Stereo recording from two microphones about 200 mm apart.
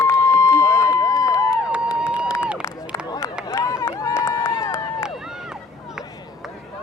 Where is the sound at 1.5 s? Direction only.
5° right (ahead or behind).